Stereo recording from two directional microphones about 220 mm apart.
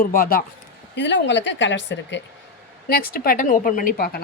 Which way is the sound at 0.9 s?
55° left (ahead or behind).